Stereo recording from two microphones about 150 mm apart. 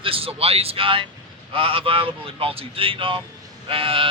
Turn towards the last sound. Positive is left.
turn(degrees=-35)  # may be behind; listen again after turning